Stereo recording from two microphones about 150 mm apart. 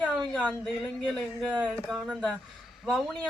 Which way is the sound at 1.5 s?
10° right (ahead or behind).